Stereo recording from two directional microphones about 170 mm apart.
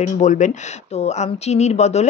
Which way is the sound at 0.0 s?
45° left (ahead or behind).